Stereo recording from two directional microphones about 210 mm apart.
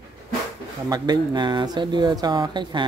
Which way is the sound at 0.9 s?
20° right (ahead or behind).